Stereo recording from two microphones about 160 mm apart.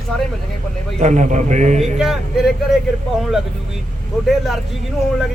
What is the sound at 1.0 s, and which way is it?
Speech, 50° right (ahead or behind).